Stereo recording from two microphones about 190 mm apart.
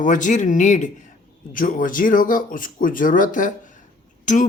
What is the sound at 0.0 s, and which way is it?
Speech, 40° left (ahead or behind).